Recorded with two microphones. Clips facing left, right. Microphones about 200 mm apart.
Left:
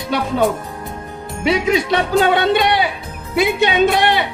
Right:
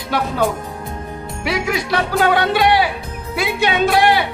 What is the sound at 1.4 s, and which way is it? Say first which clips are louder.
Speech: left 5 dB; 20° left (ahead or behind).